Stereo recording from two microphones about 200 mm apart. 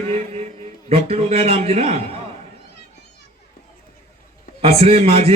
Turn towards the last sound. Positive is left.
turn(degrees=-30)  # may be behind; listen again after turning